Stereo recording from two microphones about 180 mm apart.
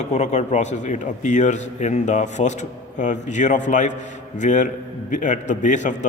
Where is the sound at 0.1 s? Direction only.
40° left (ahead or behind).